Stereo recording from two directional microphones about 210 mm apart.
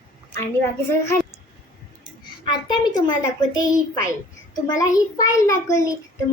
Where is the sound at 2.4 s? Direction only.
20° left (ahead or behind).